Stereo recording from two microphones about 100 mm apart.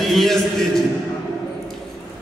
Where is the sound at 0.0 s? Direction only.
Centre (ahead or behind).